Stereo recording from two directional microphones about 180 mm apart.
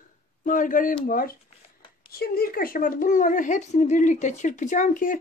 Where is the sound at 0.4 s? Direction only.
50° left (ahead or behind).